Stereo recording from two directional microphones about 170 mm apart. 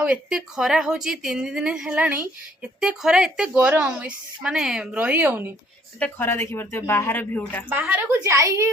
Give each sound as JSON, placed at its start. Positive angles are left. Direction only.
{"t": 0.0, "sound": "a woman's voice", "side_deg": -5}
{"t": 6.0, "sound": "speech", "side_deg": 10}
{"t": 7.7, "sound": "a woman's voice", "side_deg": -10}